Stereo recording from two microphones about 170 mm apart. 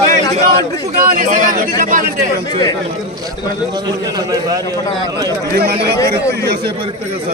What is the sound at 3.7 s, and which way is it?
A man's voice, 20° right (ahead or behind).